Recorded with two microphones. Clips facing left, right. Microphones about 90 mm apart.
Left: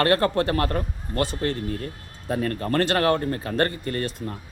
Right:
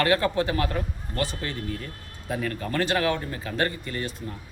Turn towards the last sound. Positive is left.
turn(degrees=55)  # may be behind; listen again after turning